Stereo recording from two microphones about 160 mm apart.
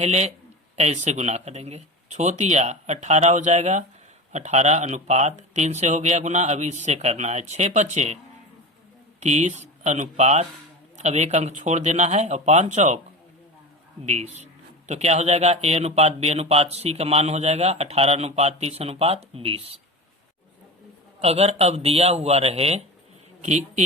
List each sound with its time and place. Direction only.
0.0 s speech: 45° right (ahead or behind)
9.2 s speech: 45° right (ahead or behind)
14.0 s speech: 45° right (ahead or behind)
21.2 s speech: 40° right (ahead or behind)